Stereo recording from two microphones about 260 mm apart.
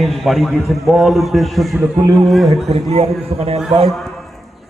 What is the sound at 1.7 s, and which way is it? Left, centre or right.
Speech, centre.